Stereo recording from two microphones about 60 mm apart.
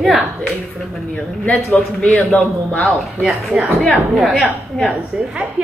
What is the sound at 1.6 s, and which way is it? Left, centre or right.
Speech, centre.